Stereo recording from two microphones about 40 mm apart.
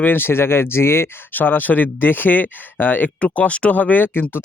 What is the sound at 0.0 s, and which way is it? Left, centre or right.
Speech, left.